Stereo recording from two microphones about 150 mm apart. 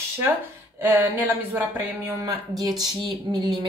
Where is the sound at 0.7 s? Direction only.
15° right (ahead or behind).